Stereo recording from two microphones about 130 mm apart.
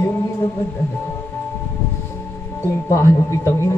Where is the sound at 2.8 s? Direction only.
20° left (ahead or behind).